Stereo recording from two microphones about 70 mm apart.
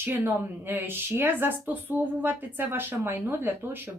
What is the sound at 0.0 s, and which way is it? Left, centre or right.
Speech, right.